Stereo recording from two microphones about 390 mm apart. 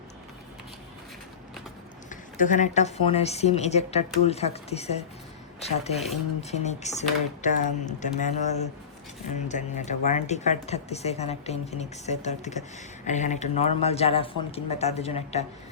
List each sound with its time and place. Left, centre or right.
2.0 s speech: centre